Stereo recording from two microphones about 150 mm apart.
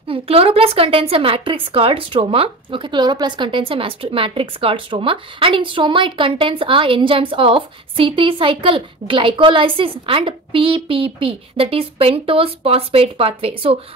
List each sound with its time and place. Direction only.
0.1 s a woman's voice: 40° right (ahead or behind)